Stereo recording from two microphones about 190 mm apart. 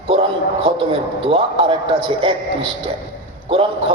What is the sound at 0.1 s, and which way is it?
A man's voice, 25° right (ahead or behind).